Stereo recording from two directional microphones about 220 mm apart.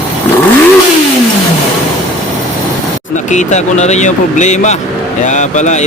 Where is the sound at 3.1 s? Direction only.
35° left (ahead or behind).